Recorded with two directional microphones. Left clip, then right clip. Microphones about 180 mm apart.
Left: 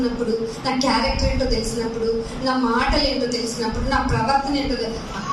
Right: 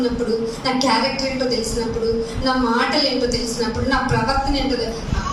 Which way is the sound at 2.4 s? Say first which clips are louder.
Right 1 dB; 15° right (ahead or behind).